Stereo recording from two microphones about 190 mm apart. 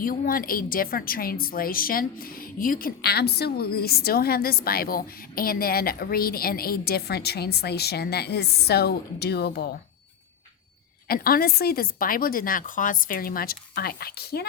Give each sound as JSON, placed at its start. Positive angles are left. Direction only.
{"t": 0.0, "sound": "a woman's voice", "side_deg": 50}
{"t": 11.1, "sound": "a woman's voice", "side_deg": 50}